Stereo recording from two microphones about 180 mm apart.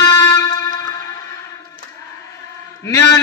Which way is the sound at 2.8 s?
15° left (ahead or behind).